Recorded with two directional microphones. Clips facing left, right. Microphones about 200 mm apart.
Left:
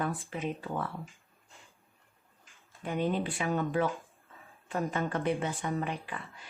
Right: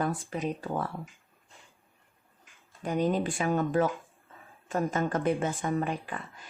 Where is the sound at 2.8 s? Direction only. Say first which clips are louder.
Right 3 dB; 40° right (ahead or behind).